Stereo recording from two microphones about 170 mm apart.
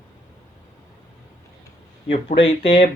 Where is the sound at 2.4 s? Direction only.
35° left (ahead or behind).